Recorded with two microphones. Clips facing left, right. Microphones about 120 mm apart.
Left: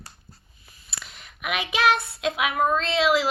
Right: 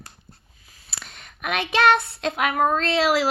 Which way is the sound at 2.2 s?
40° right (ahead or behind).